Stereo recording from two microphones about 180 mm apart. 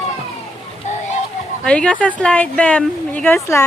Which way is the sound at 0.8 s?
40° left (ahead or behind).